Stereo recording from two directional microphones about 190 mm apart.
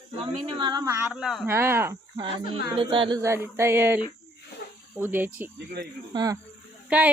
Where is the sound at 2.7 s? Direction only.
25° right (ahead or behind).